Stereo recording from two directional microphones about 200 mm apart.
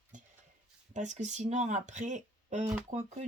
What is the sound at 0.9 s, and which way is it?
Speech, 35° right (ahead or behind).